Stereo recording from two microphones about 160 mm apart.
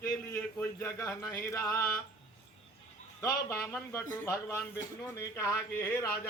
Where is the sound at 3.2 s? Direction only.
15° left (ahead or behind).